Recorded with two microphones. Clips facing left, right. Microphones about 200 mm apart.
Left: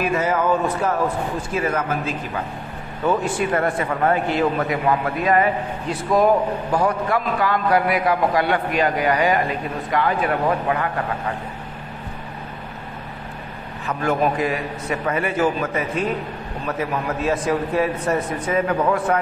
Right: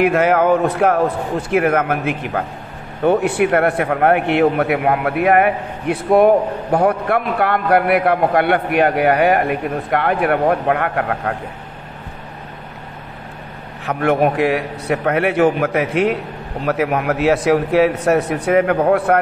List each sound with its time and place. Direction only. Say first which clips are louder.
0.0 s a man's voice: right 6 dB; 65° right (ahead or behind)
13.8 s a man's voice: right 5 dB; 70° right (ahead or behind)